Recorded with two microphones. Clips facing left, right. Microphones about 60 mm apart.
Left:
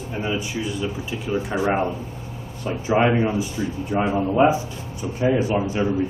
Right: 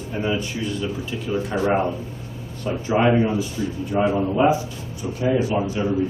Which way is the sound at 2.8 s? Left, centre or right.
Centre.